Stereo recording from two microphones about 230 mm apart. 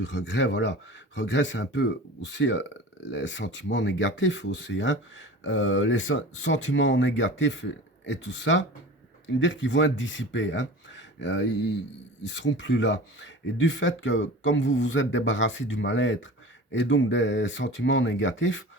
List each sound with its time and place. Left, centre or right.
0.0 s speech: left